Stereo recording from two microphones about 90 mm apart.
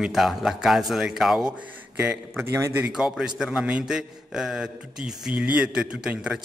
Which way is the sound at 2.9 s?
10° right (ahead or behind).